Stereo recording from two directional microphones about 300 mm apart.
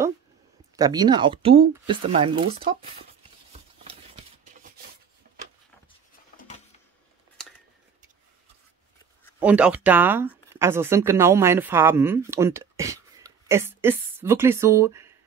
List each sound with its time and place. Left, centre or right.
0.7 s speech: centre
6.3 s a sound: left
9.4 s speech: centre